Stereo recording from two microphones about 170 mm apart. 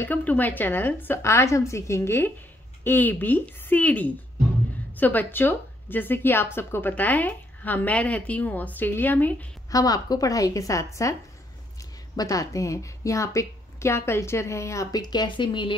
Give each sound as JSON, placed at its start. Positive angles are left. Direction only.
{"t": 0.0, "sound": "a woman's voice", "side_deg": 10}
{"t": 9.7, "sound": "a woman's voice", "side_deg": 20}
{"t": 12.2, "sound": "a woman's voice", "side_deg": 20}